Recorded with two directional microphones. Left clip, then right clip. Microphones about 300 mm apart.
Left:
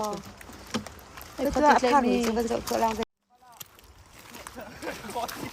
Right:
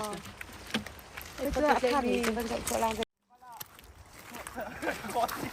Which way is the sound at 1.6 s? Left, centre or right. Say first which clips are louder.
Left 6 dB; left.